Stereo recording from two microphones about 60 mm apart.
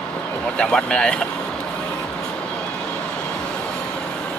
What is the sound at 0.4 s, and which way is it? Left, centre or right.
Speech, centre.